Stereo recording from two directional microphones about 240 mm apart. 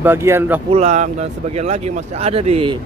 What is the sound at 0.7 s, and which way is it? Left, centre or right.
Speech, right.